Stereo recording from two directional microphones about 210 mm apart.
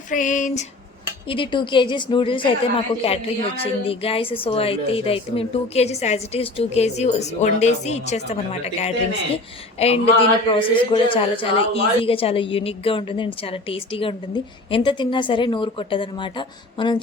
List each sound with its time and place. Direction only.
0.1 s a woman's voice: 35° left (ahead or behind)
1.3 s a woman's voice: 25° left (ahead or behind)